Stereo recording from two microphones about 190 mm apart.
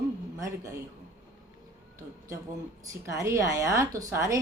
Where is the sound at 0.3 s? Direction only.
15° right (ahead or behind).